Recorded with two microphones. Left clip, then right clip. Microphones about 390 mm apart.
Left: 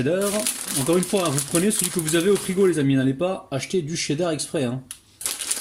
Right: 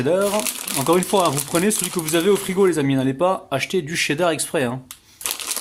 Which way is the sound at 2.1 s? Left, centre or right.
Centre.